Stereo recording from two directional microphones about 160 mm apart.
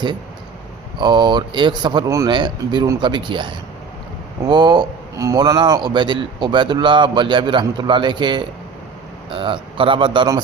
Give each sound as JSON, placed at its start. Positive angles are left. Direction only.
{"t": 0.9, "sound": "a man's voice", "side_deg": -30}